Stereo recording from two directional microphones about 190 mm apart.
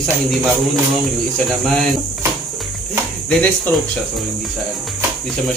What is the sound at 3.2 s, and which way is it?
Speech, 5° left (ahead or behind).